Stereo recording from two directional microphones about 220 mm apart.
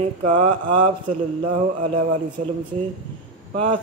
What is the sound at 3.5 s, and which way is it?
Speech, 25° right (ahead or behind).